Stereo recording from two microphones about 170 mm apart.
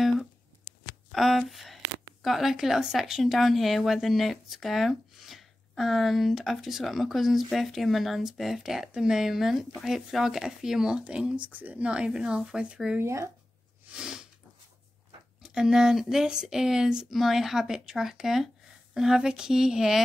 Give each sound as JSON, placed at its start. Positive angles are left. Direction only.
{"t": 1.1, "sound": "speech", "side_deg": 0}
{"t": 13.0, "sound": "speech", "side_deg": -15}
{"t": 13.9, "sound": "a sound", "side_deg": -5}
{"t": 15.4, "sound": "speech", "side_deg": -5}